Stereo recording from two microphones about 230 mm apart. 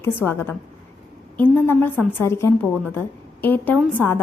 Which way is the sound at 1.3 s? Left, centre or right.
Centre.